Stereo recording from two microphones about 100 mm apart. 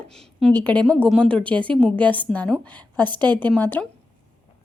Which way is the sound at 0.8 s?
10° left (ahead or behind).